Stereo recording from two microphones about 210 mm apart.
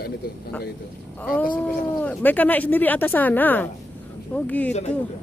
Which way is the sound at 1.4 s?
5° left (ahead or behind).